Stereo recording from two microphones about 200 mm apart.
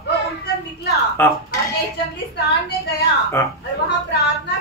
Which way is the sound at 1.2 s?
10° left (ahead or behind).